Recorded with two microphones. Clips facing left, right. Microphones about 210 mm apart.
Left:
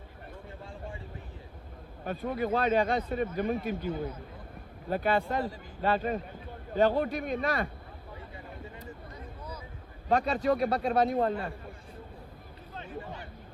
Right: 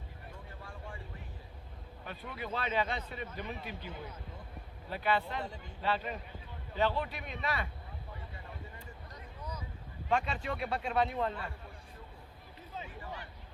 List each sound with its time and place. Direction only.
0.6 s vehicle: 25° left (ahead or behind)
2.0 s a man's voice: 45° left (ahead or behind)
10.1 s speech: 40° left (ahead or behind)